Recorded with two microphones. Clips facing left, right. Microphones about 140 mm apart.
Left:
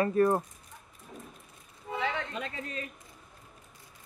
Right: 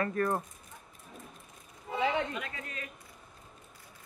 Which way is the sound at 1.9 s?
20° right (ahead or behind).